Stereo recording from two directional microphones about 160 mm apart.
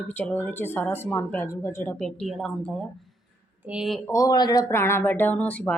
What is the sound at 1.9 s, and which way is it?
A woman's voice, 5° left (ahead or behind).